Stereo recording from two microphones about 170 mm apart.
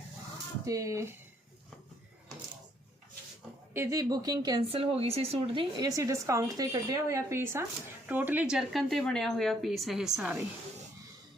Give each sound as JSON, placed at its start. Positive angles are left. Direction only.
{"t": 0.6, "sound": "speech", "side_deg": -20}
{"t": 3.8, "sound": "speech", "side_deg": -20}